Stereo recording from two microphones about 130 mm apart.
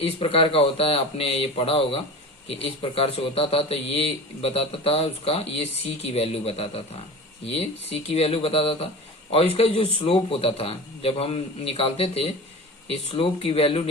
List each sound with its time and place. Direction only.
0.0 s a man's voice: 50° left (ahead or behind)